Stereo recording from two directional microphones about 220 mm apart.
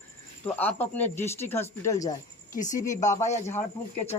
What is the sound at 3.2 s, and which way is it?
Speech, 30° left (ahead or behind).